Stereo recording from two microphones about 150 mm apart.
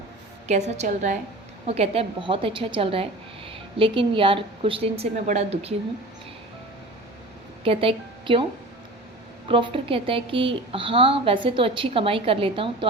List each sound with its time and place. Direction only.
0.4 s a woman's voice: 45° right (ahead or behind)
1.6 s a woman's voice: 45° right (ahead or behind)
7.6 s a woman's voice: 40° right (ahead or behind)
9.5 s a woman's voice: 35° right (ahead or behind)